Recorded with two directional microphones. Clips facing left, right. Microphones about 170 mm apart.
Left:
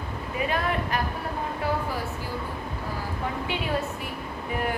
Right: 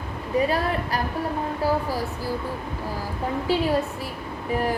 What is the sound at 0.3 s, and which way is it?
Speech, 35° right (ahead or behind).